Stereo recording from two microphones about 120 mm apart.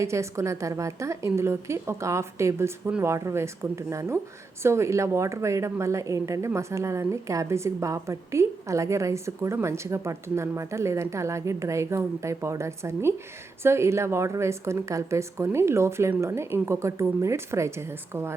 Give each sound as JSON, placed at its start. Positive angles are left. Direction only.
{"t": 0.0, "sound": "speech", "side_deg": -25}